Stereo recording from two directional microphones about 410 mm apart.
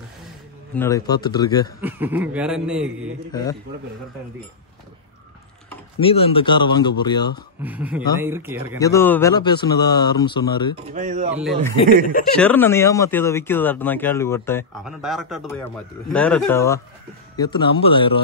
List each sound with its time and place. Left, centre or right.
0.7 s speech: centre
1.8 s speech: centre
3.3 s speech: centre
5.9 s speech: centre
7.6 s speech: centre
8.7 s speech: centre
10.9 s speech: centre
12.4 s speech: centre